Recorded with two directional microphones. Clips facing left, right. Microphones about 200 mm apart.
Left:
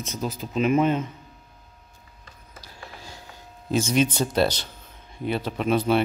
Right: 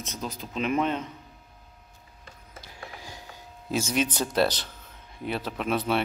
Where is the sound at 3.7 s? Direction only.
5° right (ahead or behind).